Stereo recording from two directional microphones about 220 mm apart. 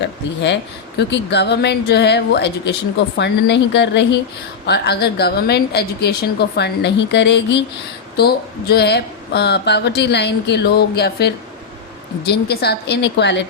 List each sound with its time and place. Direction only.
0.0 s speech: 50° left (ahead or behind)